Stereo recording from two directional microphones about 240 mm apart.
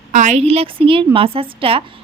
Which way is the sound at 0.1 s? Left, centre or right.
Right.